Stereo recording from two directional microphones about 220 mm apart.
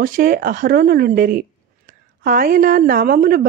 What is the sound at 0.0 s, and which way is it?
A woman's voice, 40° right (ahead or behind).